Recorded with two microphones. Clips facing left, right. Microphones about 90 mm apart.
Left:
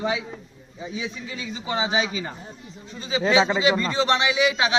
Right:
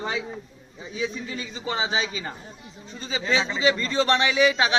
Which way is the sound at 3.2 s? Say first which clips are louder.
Left 6 dB; 70° left (ahead or behind).